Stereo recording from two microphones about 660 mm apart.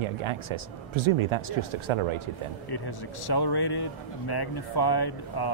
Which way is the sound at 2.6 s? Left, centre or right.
Left.